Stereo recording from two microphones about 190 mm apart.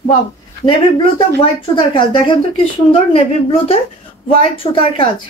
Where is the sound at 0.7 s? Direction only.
25° left (ahead or behind).